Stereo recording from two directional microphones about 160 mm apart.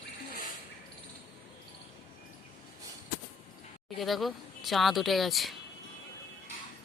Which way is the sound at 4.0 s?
Centre (ahead or behind).